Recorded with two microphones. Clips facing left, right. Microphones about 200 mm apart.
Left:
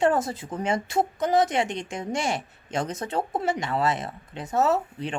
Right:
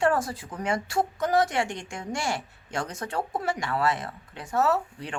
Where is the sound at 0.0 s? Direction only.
20° left (ahead or behind).